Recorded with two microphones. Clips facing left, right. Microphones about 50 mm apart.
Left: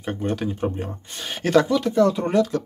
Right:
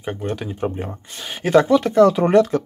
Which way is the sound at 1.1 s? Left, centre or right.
Centre.